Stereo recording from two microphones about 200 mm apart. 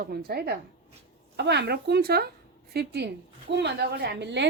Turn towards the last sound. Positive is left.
turn(degrees=-60)  # may be behind; listen again after turning